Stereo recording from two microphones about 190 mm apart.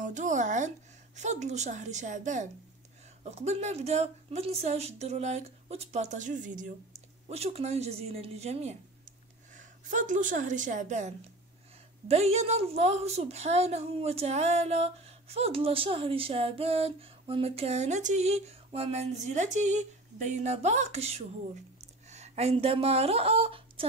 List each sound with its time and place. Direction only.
0.0 s a woman's voice: 40° right (ahead or behind)